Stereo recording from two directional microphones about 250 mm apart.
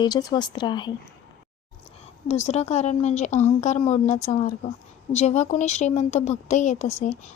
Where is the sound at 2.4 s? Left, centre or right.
Left.